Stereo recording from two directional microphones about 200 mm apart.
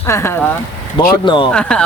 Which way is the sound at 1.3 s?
25° left (ahead or behind).